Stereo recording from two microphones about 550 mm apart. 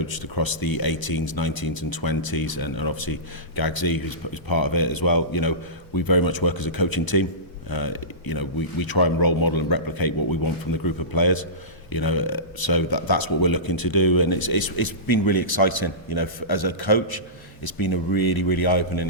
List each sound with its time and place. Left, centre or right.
0.0 s speech: left